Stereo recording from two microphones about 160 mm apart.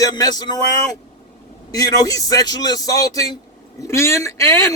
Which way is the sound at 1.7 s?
20° left (ahead or behind).